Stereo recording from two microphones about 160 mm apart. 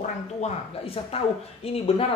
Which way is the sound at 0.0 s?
45° left (ahead or behind).